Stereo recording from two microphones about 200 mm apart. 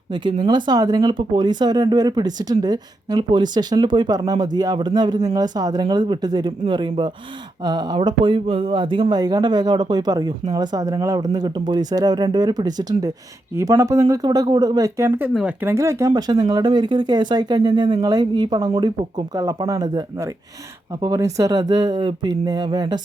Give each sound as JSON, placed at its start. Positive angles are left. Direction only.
{"t": 0.1, "sound": "speech", "side_deg": -25}